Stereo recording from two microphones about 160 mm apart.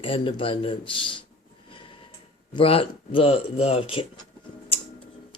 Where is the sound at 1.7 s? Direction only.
35° left (ahead or behind).